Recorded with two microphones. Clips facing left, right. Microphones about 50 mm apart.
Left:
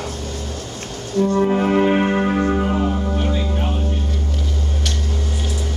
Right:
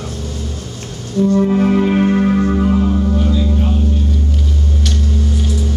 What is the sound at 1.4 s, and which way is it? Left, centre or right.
Music, centre.